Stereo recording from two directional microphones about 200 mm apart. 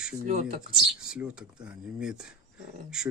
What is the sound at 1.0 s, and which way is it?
Speech, 5° right (ahead or behind).